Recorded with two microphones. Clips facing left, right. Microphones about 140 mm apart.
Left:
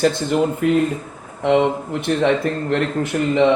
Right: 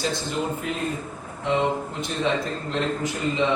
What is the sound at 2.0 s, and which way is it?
A man's voice, 65° left (ahead or behind).